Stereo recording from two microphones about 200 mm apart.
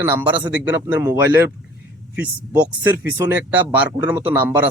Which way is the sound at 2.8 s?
10° right (ahead or behind).